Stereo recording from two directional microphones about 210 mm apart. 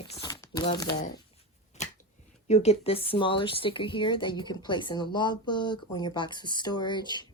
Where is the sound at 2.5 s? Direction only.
30° left (ahead or behind).